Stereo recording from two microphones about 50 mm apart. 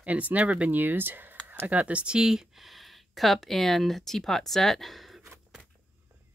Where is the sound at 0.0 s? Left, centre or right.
Right.